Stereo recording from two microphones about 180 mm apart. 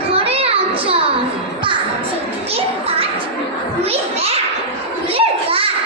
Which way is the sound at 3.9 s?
35° right (ahead or behind).